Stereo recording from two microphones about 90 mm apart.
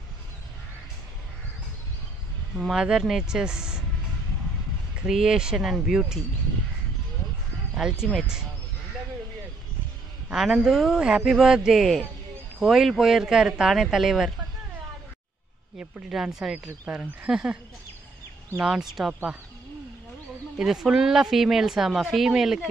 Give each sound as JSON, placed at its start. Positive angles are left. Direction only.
{"t": 2.5, "sound": "speech", "side_deg": -5}
{"t": 4.9, "sound": "speech", "side_deg": -5}
{"t": 7.7, "sound": "speech", "side_deg": -10}
{"t": 10.3, "sound": "speech", "side_deg": -5}
{"t": 15.8, "sound": "speech", "side_deg": -5}
{"t": 16.5, "sound": "speech", "side_deg": -25}
{"t": 16.9, "sound": "speech", "side_deg": -15}
{"t": 18.6, "sound": "speech", "side_deg": -5}
{"t": 20.5, "sound": "speech", "side_deg": -5}